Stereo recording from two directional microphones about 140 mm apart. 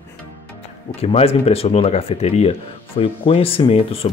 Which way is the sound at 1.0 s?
45° left (ahead or behind).